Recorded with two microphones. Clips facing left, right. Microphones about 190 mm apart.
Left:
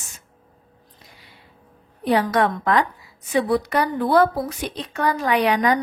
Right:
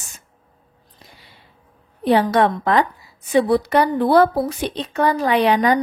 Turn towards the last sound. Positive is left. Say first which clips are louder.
# right 3 dB
turn(degrees=-30)  # may be behind; listen again after turning